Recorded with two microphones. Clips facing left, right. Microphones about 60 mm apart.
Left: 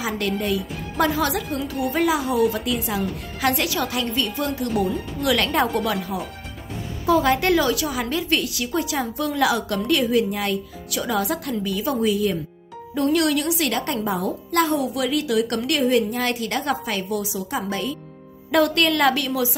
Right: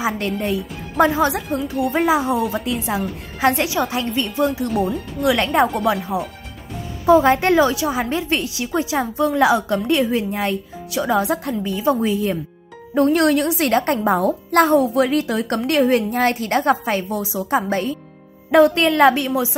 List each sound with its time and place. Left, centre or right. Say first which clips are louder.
0.0 s a woman's voice: right 3 dB; right
7.1 s a woman's voice: right 5 dB; right
18.5 s a woman's voice: right 5 dB; right